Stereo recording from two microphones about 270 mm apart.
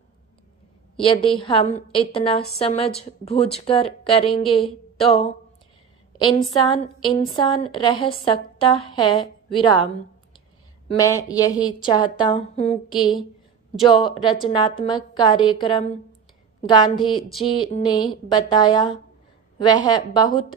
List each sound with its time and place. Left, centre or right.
1.0 s a woman's voice: centre
6.1 s a woman's voice: centre